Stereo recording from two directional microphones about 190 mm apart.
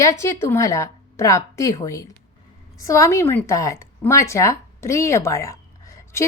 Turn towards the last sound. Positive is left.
turn(degrees=15)  # may be behind; listen again after turning